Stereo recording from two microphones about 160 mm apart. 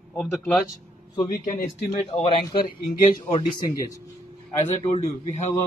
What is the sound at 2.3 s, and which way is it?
Speech, 30° left (ahead or behind).